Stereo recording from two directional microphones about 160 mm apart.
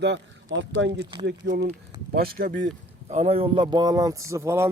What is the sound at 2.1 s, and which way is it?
Speech, 70° right (ahead or behind).